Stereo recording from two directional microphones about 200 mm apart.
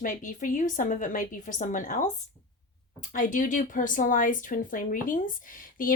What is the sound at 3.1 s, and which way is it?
A woman's voice, 40° left (ahead or behind).